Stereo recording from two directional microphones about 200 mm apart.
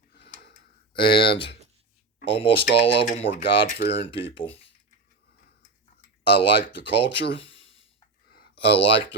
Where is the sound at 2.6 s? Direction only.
55° left (ahead or behind).